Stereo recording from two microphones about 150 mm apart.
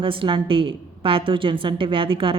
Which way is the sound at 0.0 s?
35° right (ahead or behind).